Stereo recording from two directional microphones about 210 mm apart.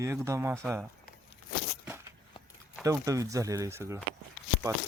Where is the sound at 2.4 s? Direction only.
25° left (ahead or behind).